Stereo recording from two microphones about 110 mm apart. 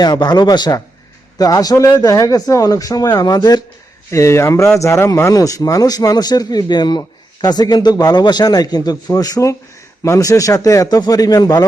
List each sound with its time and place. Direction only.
0.0 s speech: 40° left (ahead or behind)